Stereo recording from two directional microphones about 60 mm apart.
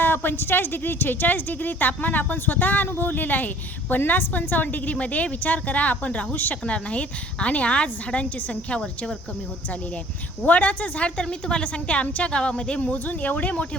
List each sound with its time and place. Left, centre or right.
0.0 s a woman's voice: left
10.4 s a woman's voice: left